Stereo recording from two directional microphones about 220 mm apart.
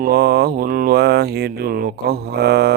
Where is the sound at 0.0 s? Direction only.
45° right (ahead or behind).